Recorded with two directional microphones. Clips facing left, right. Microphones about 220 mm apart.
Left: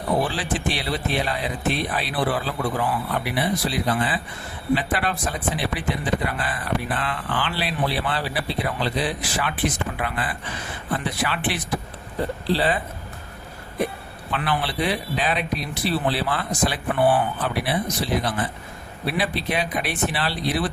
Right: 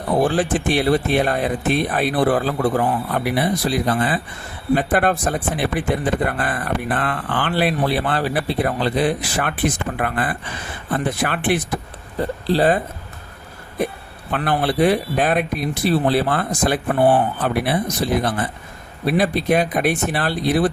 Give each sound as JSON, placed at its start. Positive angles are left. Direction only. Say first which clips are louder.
{"t": 0.2, "sound": "speech", "louder": "right 7 dB", "side_deg": -50}
{"t": 14.3, "sound": "speech", "louder": "right 5 dB", "side_deg": -50}